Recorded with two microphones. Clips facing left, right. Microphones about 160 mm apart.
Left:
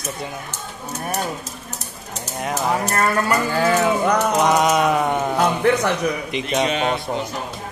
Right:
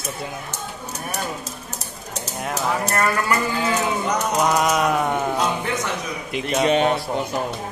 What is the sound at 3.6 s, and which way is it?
Speech, 60° left (ahead or behind).